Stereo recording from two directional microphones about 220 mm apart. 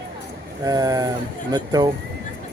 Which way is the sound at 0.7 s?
15° right (ahead or behind).